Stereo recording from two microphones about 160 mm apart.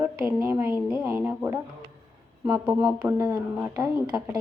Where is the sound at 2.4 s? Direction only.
5° right (ahead or behind); by 3.9 s 20° right (ahead or behind).